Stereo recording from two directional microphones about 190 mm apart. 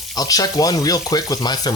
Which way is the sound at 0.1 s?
20° left (ahead or behind).